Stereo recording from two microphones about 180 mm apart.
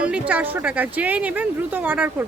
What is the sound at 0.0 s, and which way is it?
Speech, 5° right (ahead or behind).